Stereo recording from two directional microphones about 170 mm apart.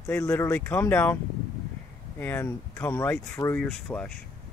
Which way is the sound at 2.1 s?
10° left (ahead or behind).